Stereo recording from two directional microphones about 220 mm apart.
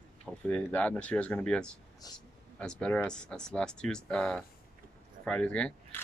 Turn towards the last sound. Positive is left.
turn(degrees=5)  # may be behind; listen again after turning